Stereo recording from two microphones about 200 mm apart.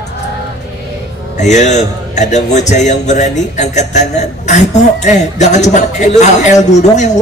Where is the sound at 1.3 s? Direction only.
35° left (ahead or behind).